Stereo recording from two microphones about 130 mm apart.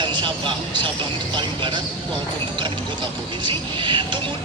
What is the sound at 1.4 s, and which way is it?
Speech, 40° right (ahead or behind).